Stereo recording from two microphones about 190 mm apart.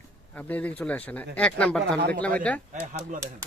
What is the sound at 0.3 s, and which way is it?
Speech, 10° left (ahead or behind).